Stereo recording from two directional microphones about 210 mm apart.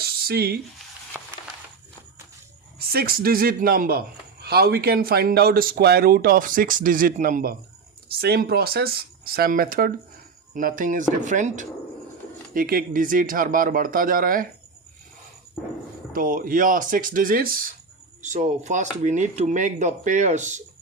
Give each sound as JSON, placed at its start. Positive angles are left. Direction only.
{"t": 0.0, "sound": "a sound", "side_deg": -45}
{"t": 2.7, "sound": "a man's voice", "side_deg": -45}
{"t": 16.1, "sound": "speech", "side_deg": -40}